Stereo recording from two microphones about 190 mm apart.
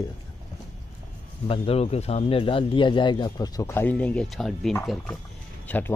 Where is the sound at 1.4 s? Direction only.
30° left (ahead or behind).